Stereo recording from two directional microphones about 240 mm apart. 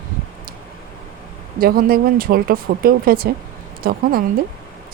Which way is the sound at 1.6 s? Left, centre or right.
Right.